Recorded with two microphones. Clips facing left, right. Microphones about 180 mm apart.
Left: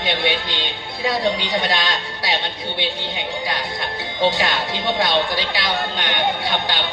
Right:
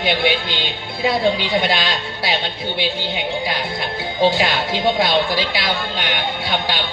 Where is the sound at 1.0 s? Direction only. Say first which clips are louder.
Right 3 dB; 25° right (ahead or behind).